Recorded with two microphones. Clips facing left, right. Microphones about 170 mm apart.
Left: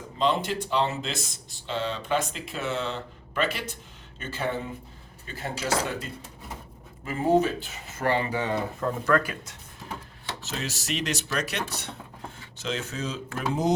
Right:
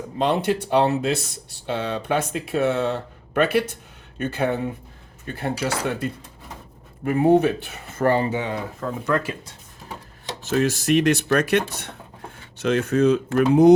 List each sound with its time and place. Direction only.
0.2 s speech: 60° right (ahead or behind); by 8.3 s 45° right (ahead or behind)
8.5 s speech: centre (ahead or behind)
9.0 s speech: 20° right (ahead or behind)
10.4 s speech: 55° right (ahead or behind)